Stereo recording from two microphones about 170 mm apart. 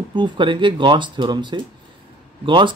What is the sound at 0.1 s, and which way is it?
Speech, 30° right (ahead or behind).